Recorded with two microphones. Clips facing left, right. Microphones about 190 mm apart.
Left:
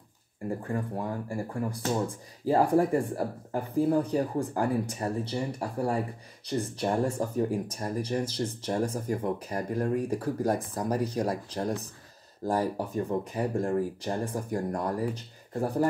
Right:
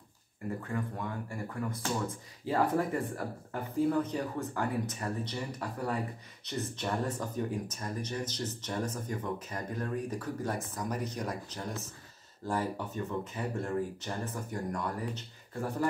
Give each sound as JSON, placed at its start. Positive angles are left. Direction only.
{"t": 0.5, "sound": "speech", "side_deg": 30}